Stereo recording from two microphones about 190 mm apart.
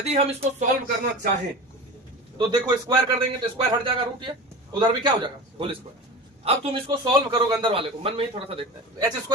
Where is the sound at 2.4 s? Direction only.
25° right (ahead or behind).